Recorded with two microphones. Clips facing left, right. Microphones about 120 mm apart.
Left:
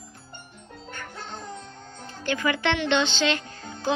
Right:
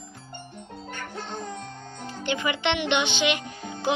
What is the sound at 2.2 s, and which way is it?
Speech, 20° right (ahead or behind).